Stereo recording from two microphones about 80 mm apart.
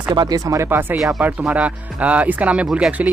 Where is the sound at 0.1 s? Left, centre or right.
Right.